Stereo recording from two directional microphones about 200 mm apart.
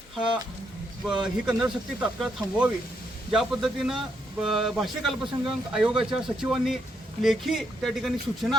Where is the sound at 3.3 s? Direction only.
Centre (ahead or behind).